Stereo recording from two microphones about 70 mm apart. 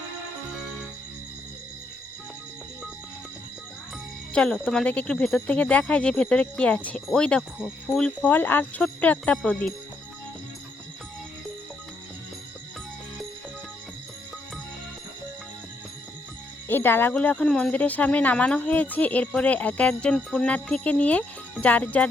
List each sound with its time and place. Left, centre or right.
4.3 s speech: centre
5.5 s speech: centre
8.3 s speech: left
16.6 s speech: left
17.2 s speech: centre